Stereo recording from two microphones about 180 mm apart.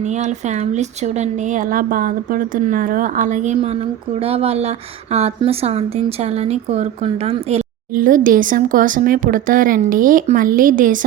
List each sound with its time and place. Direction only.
0.0 s a woman's voice: 40° right (ahead or behind)
7.9 s a woman's voice: 50° right (ahead or behind)